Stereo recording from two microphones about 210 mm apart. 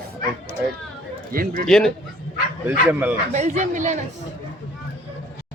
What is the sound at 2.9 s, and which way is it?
Speech, 5° right (ahead or behind).